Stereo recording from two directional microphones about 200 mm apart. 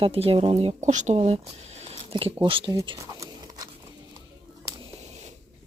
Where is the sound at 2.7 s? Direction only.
20° right (ahead or behind).